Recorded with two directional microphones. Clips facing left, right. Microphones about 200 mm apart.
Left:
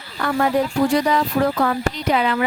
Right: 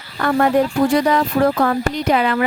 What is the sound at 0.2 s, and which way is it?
Speech, 50° right (ahead or behind).